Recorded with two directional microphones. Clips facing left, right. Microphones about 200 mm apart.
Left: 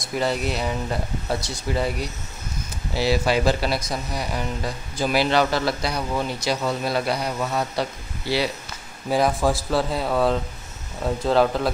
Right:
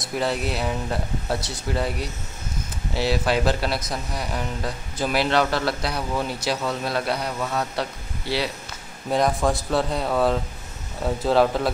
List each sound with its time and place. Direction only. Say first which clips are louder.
0.2 s speech: left 1 dB; centre (ahead or behind)
9.1 s speech: left 1 dB; 5° left (ahead or behind)